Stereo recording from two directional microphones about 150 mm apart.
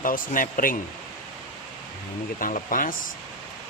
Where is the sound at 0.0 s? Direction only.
65° left (ahead or behind).